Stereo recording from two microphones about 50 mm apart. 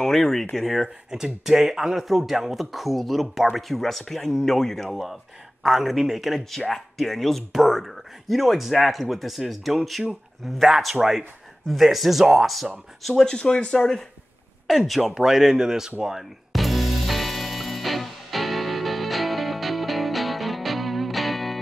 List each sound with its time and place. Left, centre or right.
0.0 s speech: centre
13.1 s speech: centre
14.7 s speech: centre
16.0 s music: centre